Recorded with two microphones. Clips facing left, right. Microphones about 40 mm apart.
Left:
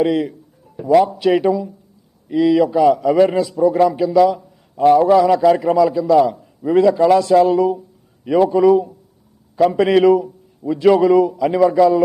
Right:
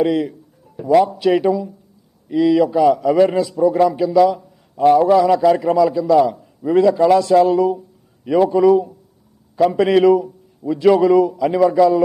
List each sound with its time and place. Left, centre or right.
0.0 s a man's voice: centre